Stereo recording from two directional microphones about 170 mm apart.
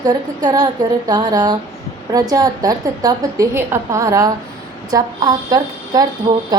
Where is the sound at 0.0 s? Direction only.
20° right (ahead or behind).